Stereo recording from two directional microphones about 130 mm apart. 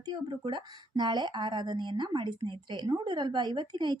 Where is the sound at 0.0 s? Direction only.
35° right (ahead or behind).